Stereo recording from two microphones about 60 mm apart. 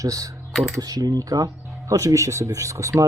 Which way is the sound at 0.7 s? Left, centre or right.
Right.